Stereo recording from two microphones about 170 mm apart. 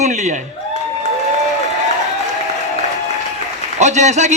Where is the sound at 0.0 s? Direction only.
45° right (ahead or behind).